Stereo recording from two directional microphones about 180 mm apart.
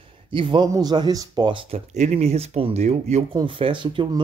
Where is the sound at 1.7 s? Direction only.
40° right (ahead or behind).